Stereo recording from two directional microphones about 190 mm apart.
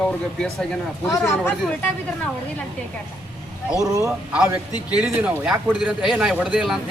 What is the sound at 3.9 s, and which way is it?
Speech, 15° right (ahead or behind).